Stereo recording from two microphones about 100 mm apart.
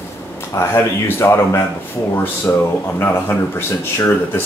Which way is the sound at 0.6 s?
25° left (ahead or behind).